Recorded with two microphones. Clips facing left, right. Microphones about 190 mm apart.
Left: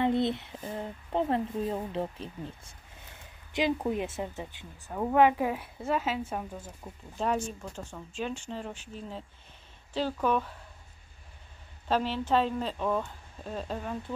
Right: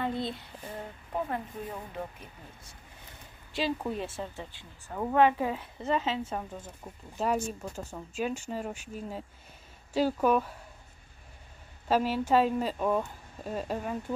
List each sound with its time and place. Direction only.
0.0 s speech: 20° left (ahead or behind)
3.5 s a woman's voice: 15° left (ahead or behind)
6.8 s speech: 5° right (ahead or behind)
11.9 s speech: 10° right (ahead or behind)